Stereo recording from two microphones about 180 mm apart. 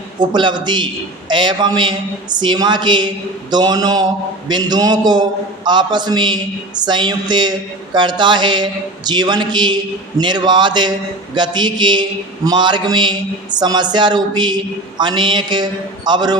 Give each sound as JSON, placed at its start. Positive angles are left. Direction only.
{"t": 0.3, "sound": "a man's voice", "side_deg": -25}